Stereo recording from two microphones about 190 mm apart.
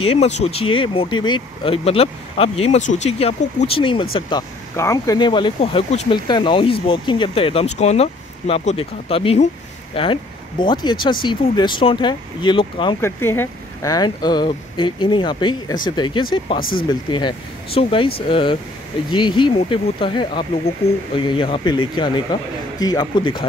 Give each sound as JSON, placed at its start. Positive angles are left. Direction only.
{"t": 0.0, "sound": "speech", "side_deg": 35}
{"t": 13.0, "sound": "speech", "side_deg": 10}
{"t": 16.5, "sound": "speech", "side_deg": 50}
{"t": 17.7, "sound": "speech", "side_deg": 30}